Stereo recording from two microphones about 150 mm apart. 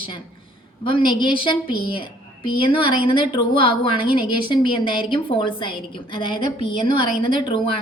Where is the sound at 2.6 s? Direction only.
35° left (ahead or behind).